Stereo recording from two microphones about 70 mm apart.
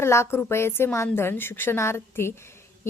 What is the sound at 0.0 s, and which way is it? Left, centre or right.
A woman's voice, left.